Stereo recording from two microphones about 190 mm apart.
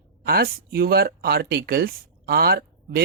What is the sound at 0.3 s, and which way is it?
Speech, 55° right (ahead or behind).